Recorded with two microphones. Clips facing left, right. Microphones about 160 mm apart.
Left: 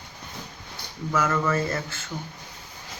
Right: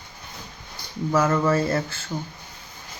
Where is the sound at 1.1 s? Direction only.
30° right (ahead or behind).